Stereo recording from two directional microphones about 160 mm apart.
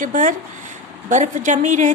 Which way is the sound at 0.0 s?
50° right (ahead or behind).